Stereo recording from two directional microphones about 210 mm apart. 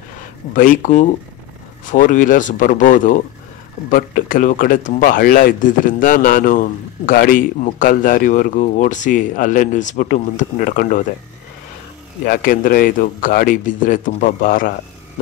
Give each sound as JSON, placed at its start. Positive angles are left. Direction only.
{"t": 0.6, "sound": "speech", "side_deg": 40}
{"t": 12.3, "sound": "speech", "side_deg": 40}